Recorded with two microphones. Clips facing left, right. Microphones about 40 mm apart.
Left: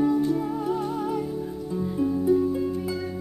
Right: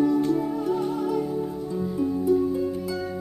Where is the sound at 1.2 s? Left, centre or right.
Centre.